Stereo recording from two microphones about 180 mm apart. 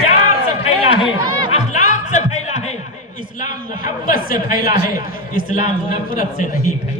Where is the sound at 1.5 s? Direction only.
40° left (ahead or behind).